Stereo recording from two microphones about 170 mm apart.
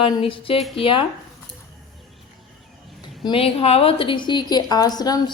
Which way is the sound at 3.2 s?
35° left (ahead or behind).